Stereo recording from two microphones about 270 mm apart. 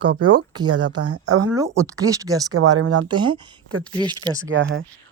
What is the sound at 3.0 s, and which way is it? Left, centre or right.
Speech, centre.